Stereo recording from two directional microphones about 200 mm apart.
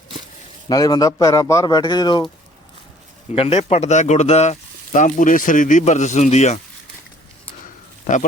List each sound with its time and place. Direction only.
0.7 s speech: 20° left (ahead or behind)
3.3 s speech: 30° left (ahead or behind)